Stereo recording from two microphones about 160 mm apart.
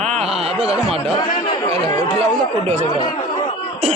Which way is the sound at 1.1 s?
30° left (ahead or behind).